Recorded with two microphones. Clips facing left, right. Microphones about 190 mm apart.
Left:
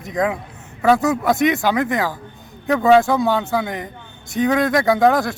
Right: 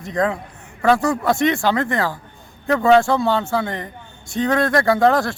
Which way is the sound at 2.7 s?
5° left (ahead or behind).